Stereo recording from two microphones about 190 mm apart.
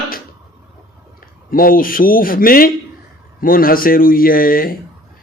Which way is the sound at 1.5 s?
50° left (ahead or behind).